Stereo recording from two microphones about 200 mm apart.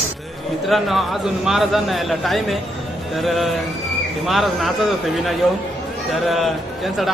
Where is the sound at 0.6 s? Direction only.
Centre (ahead or behind).